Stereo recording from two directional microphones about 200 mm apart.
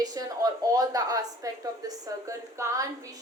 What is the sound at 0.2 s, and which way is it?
A woman's voice, 15° right (ahead or behind).